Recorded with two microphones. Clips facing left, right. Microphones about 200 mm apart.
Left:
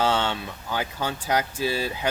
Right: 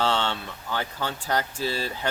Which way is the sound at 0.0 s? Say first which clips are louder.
Left 2 dB; 10° left (ahead or behind).